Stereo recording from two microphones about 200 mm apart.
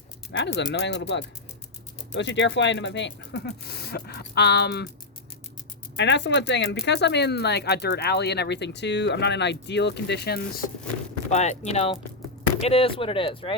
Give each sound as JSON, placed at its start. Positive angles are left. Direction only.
{"t": 0.3, "sound": "speech", "side_deg": 60}
{"t": 6.0, "sound": "speech", "side_deg": 60}
{"t": 11.3, "sound": "speech", "side_deg": 35}